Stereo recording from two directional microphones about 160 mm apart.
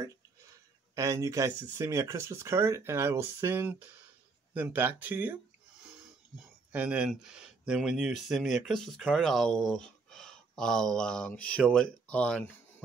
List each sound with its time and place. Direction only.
0.9 s speech: 20° right (ahead or behind); by 12.5 s 10° left (ahead or behind)